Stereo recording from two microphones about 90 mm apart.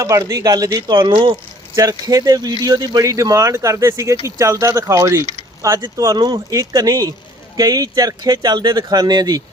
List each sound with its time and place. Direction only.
0.0 s speech: 35° right (ahead or behind)
1.1 s speech: 70° right (ahead or behind)
1.7 s speech: 40° right (ahead or behind)